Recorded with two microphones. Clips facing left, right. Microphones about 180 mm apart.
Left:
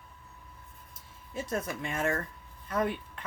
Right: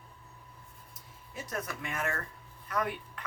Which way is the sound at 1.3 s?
25° left (ahead or behind).